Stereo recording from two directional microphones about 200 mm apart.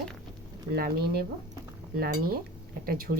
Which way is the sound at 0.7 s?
50° right (ahead or behind).